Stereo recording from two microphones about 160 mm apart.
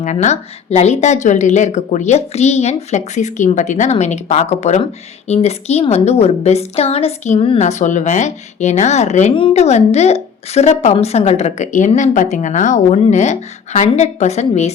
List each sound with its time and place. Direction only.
0.0 s a woman's voice: 50° left (ahead or behind)